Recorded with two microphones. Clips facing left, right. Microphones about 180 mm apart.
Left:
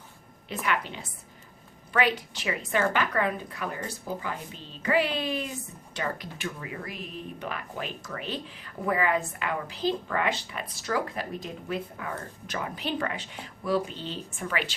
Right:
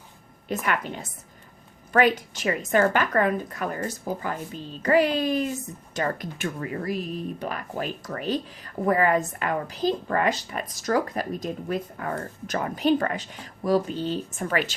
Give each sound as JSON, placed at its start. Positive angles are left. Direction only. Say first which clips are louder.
{"t": 0.4, "sound": "speech", "louder": "right 3 dB", "side_deg": -45}